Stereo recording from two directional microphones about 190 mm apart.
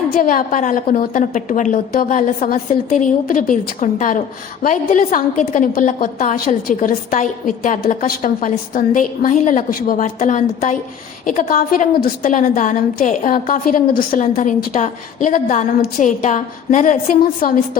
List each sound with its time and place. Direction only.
0.1 s a woman's voice: 45° left (ahead or behind)